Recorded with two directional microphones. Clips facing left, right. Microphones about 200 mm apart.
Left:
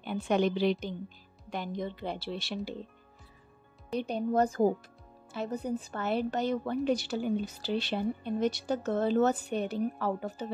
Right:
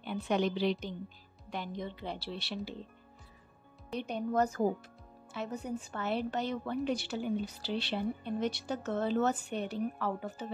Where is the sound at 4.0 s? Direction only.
35° left (ahead or behind).